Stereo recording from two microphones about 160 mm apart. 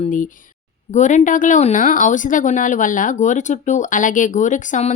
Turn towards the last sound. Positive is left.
turn(degrees=50)  # may be behind; listen again after turning